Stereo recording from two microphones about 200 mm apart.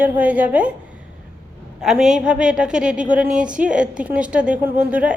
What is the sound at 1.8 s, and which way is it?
A woman's voice, 5° right (ahead or behind).